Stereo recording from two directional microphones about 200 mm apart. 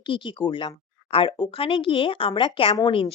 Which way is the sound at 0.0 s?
25° left (ahead or behind).